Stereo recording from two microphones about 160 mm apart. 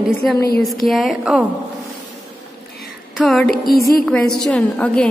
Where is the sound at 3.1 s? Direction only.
Centre (ahead or behind).